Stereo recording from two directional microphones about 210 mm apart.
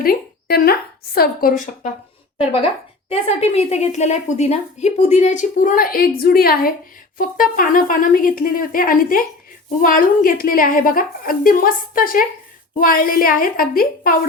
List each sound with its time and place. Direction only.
0.0 s a woman's voice: 45° left (ahead or behind)
2.4 s a woman's voice: 25° left (ahead or behind); by 14.3 s 45° left (ahead or behind)